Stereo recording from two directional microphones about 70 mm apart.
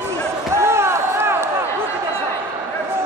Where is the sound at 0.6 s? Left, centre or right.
Right.